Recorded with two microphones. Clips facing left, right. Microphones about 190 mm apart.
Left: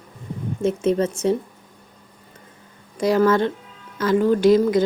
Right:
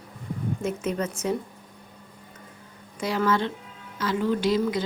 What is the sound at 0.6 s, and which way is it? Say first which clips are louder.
Speech: left 10 dB; 30° left (ahead or behind).